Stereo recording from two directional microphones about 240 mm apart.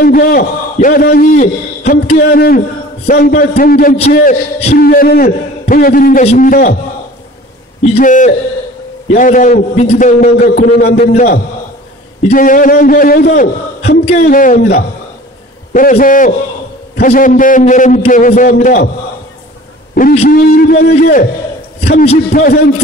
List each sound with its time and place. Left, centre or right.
0.0 s a man's voice: left
7.8 s a man's voice: left
12.3 s a man's voice: left
19.9 s a man's voice: left